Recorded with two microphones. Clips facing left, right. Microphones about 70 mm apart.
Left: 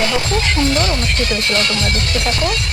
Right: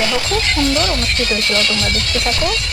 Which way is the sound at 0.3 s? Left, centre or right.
Left.